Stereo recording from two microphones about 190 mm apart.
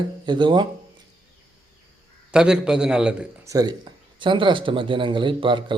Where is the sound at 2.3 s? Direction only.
5° right (ahead or behind).